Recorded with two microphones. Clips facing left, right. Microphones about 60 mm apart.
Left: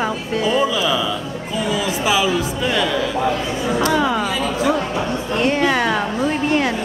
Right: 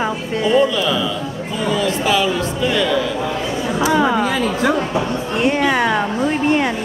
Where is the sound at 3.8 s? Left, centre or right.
Centre.